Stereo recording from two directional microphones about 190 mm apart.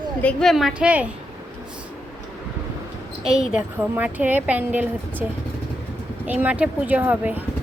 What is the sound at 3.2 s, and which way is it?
A woman's voice, 5° right (ahead or behind).